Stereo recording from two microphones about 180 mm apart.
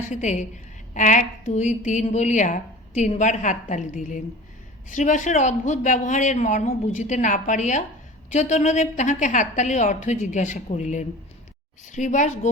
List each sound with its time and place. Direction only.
0.0 s a woman's voice: 40° left (ahead or behind)